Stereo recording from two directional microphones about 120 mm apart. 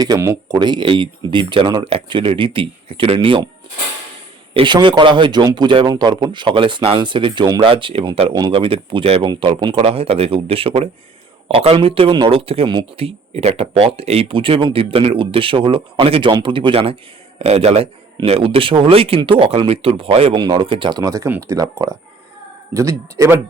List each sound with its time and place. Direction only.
0.5 s speech: 40° right (ahead or behind)
4.5 s a man's voice: 40° right (ahead or behind)
9.7 s speech: 55° right (ahead or behind)
17.4 s a man's voice: 60° right (ahead or behind)
20.3 s a man's voice: 35° right (ahead or behind)
21.0 s speech: 25° right (ahead or behind)